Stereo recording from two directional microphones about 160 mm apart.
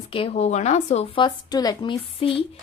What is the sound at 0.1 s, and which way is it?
Speech, 35° left (ahead or behind).